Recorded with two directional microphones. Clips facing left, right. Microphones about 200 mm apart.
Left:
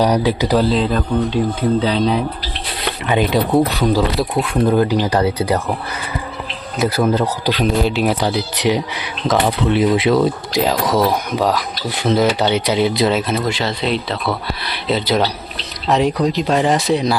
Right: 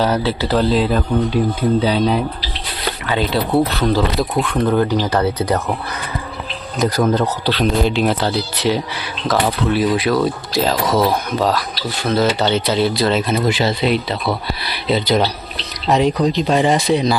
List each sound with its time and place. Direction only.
0.0 s speech: 15° left (ahead or behind)
0.6 s speech: centre (ahead or behind)
3.1 s speech: 15° left (ahead or behind)
6.7 s speech: 10° left (ahead or behind)
13.3 s speech: 5° right (ahead or behind)